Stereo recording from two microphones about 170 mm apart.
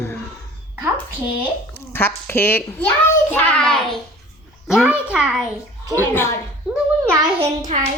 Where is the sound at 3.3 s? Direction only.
10° left (ahead or behind).